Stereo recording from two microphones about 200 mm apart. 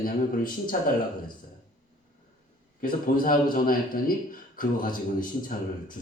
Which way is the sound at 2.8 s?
45° left (ahead or behind).